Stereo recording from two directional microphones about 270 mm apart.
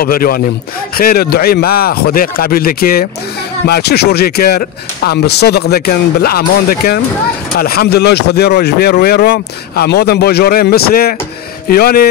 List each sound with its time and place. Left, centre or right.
0.0 s speech: left